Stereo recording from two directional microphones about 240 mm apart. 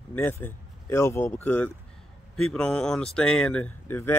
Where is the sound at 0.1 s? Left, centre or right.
Centre.